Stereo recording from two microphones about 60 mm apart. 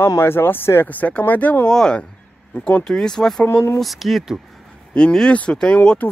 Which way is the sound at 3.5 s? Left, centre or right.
Left.